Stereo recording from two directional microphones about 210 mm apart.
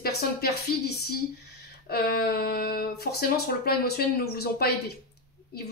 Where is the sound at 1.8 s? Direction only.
45° left (ahead or behind).